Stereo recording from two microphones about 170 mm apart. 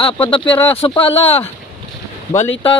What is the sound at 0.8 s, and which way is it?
Speech, 35° left (ahead or behind).